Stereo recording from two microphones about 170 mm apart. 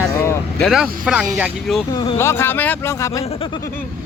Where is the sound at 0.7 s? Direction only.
5° right (ahead or behind).